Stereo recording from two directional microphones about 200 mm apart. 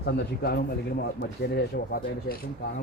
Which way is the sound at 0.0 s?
55° left (ahead or behind).